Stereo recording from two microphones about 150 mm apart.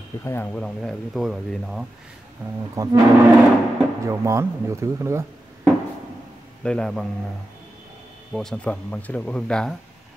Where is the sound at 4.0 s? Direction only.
20° right (ahead or behind).